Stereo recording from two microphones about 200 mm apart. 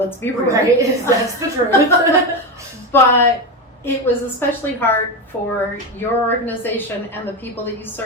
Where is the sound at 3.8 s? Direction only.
10° left (ahead or behind).